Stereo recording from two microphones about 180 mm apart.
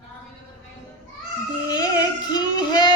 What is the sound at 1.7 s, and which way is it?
Female singing, 25° left (ahead or behind).